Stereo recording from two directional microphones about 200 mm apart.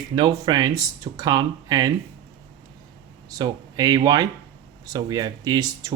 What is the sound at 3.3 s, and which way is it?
Speech, 20° right (ahead or behind).